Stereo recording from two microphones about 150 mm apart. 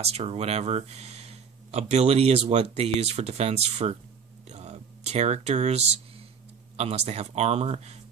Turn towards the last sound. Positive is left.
turn(degrees=-45)  # may be behind; listen again after turning